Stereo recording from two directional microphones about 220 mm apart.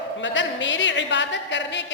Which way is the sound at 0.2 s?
55° left (ahead or behind).